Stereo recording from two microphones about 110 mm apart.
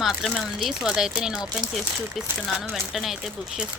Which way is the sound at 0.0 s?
Centre (ahead or behind).